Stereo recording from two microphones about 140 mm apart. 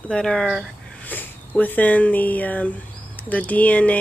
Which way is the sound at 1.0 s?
15° left (ahead or behind).